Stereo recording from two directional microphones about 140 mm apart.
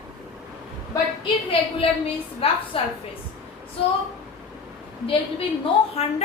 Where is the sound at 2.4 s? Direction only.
40° left (ahead or behind).